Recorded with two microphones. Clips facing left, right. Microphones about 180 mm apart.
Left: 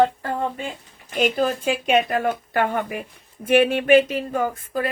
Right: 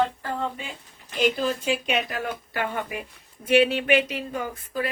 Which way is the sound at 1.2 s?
50° left (ahead or behind).